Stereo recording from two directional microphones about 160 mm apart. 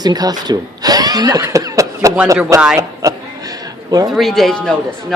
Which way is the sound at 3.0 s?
20° right (ahead or behind).